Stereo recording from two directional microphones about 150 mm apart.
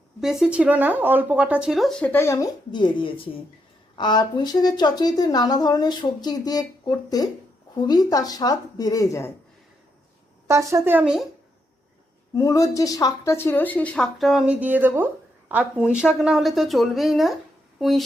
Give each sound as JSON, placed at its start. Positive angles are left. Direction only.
{"t": 0.2, "sound": "speech", "side_deg": -5}
{"t": 2.1, "sound": "speech", "side_deg": 20}
{"t": 2.7, "sound": "speech", "side_deg": 35}
{"t": 10.5, "sound": "speech", "side_deg": -20}
{"t": 12.3, "sound": "speech", "side_deg": 20}